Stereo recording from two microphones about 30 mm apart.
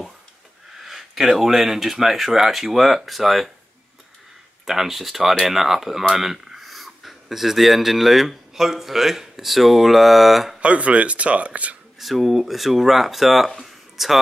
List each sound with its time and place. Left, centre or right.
0.7 s speech: centre
4.6 s speech: centre
10.6 s speech: right
12.0 s speech: centre